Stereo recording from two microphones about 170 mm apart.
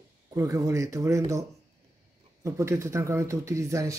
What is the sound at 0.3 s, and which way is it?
Speech, 20° right (ahead or behind).